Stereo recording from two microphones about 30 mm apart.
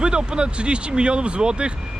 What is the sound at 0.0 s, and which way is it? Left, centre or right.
Speech, right.